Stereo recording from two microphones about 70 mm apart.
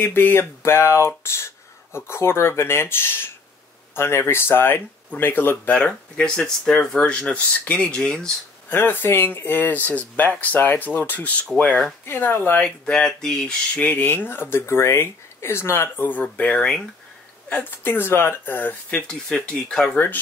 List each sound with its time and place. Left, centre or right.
0.0 s speech: left
5.7 s speech: centre
8.6 s speech: left
11.6 s speech: centre
12.1 s speech: left
12.6 s speech: centre
13.7 s speech: left